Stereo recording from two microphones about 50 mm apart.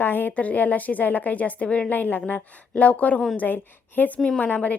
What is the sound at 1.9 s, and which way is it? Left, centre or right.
A woman's voice, left.